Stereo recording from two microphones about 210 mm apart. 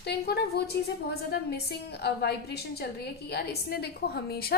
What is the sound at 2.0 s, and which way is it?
A woman's voice, 50° left (ahead or behind).